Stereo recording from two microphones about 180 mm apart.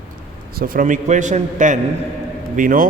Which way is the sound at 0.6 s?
50° right (ahead or behind).